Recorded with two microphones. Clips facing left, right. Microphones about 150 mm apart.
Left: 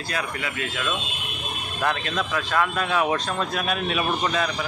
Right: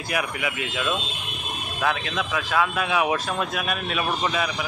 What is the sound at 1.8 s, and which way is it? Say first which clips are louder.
Speech: even; 5° right (ahead or behind).